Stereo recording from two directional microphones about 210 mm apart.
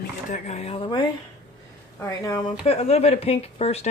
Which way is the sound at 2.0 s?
15° left (ahead or behind).